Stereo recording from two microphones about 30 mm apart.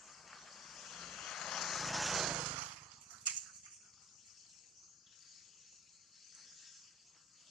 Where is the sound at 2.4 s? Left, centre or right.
Right.